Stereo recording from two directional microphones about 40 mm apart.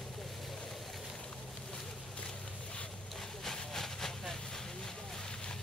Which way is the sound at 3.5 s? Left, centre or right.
Centre.